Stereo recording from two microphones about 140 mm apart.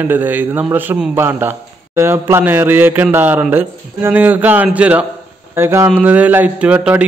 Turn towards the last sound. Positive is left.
turn(degrees=-10)  # may be behind; listen again after turning